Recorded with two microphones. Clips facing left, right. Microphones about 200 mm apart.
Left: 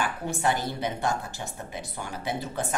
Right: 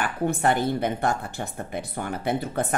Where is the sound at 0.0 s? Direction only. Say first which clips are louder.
Right 4 dB; 55° right (ahead or behind).